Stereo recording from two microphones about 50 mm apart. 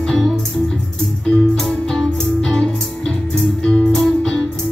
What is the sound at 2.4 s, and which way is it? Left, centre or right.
Music, centre.